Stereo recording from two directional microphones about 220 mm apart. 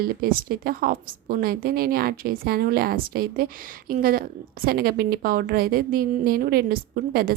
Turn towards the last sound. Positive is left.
turn(degrees=-45)  # may be behind; listen again after turning